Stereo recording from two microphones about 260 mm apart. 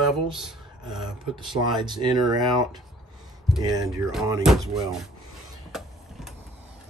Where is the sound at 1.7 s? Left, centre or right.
Centre.